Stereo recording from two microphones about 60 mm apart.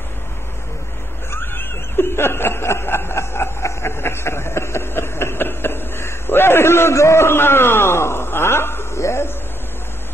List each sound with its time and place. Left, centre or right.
1.3 s snicker: left